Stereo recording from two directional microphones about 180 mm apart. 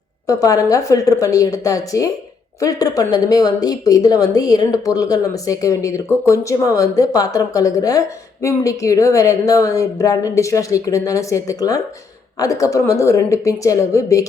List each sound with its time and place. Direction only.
0.3 s a woman's voice: 20° left (ahead or behind)